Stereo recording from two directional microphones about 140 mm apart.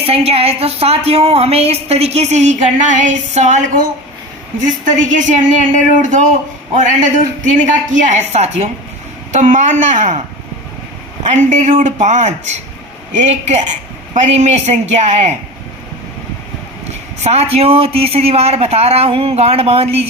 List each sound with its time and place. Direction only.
0.0 s a woman's voice: 45° right (ahead or behind)
4.6 s a woman's voice: 65° right (ahead or behind)
9.3 s a woman's voice: 60° right (ahead or behind)
11.2 s a woman's voice: 60° right (ahead or behind)
17.2 s a woman's voice: 50° right (ahead or behind)